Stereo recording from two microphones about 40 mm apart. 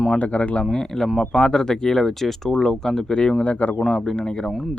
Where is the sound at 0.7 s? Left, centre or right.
Centre.